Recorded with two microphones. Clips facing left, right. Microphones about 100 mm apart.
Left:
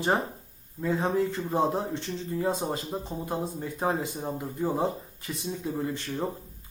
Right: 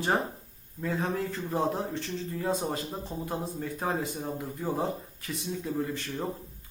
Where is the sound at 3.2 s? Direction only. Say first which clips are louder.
Even; 15° left (ahead or behind).